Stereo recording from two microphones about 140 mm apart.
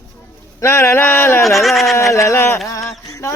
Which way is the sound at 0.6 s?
20° left (ahead or behind).